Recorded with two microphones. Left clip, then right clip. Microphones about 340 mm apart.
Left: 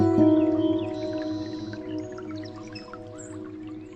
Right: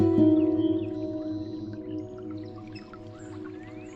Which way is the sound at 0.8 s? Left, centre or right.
Left.